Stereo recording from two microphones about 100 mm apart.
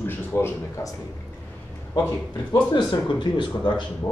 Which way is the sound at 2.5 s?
45° left (ahead or behind).